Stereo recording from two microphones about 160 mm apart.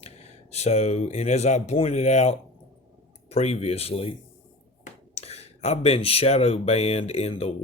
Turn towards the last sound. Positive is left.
turn(degrees=40)  # may be behind; listen again after turning